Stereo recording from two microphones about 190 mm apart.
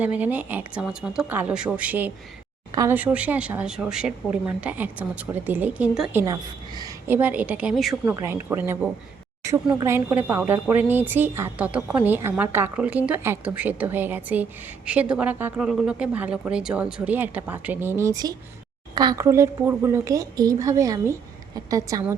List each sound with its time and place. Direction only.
0.0 s speech: 10° right (ahead or behind)
6.2 s speech: 20° right (ahead or behind); by 7.9 s centre (ahead or behind)
8.0 s speech: 15° right (ahead or behind)